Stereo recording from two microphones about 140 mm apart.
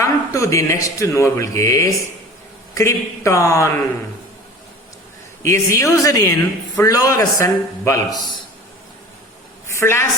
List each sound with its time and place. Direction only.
0.0 s speech: 20° left (ahead or behind)
5.4 s speech: 20° left (ahead or behind)
9.7 s speech: 20° left (ahead or behind)